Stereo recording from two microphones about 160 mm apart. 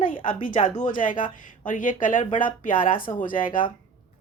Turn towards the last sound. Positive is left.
turn(degrees=60)  # may be behind; listen again after turning